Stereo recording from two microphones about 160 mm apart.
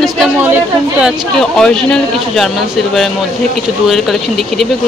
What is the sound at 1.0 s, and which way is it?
Speech, 5° left (ahead or behind).